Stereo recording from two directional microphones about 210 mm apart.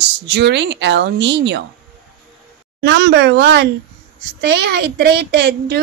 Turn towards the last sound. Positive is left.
turn(degrees=-55)  # may be behind; listen again after turning